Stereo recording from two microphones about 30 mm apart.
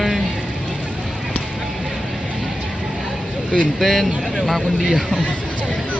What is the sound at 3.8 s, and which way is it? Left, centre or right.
Speech, centre.